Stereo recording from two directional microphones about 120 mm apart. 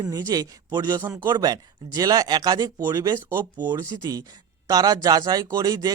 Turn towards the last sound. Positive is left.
turn(degrees=-30)  # may be behind; listen again after turning